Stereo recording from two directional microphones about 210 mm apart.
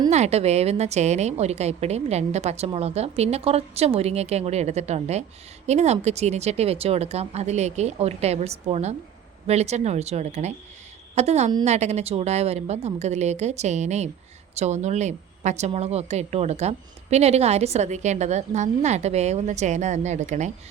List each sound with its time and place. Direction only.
0.1 s a woman's voice: 30° right (ahead or behind)